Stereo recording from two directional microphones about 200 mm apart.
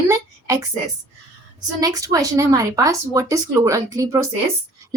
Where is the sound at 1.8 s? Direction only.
15° right (ahead or behind).